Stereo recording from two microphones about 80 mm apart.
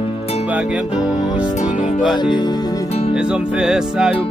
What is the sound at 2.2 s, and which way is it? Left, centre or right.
Music, left.